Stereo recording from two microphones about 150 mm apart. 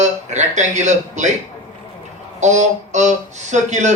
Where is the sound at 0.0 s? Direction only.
50° right (ahead or behind).